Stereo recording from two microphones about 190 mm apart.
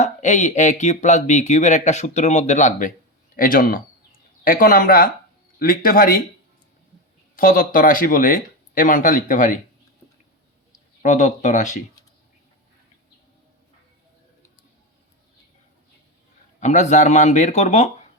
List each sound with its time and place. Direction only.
0.0 s speech: 40° left (ahead or behind)
7.3 s speech: 45° left (ahead or behind)
11.0 s speech: 40° left (ahead or behind)
16.6 s speech: 40° left (ahead or behind)